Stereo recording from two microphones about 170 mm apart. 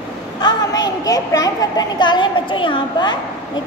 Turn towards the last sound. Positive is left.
turn(degrees=25)  # may be behind; listen again after turning